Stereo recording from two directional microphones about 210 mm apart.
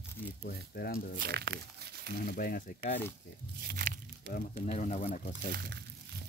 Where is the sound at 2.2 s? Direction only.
45° left (ahead or behind).